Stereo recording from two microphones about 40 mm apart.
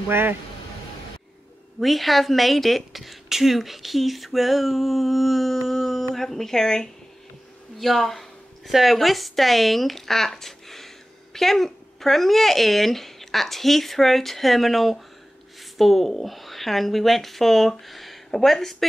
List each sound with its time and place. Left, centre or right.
0.1 s a man's voice: right
1.8 s speech: centre
7.8 s a sound: centre
8.9 s speech: centre